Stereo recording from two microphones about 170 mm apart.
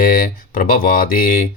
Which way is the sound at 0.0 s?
55° left (ahead or behind).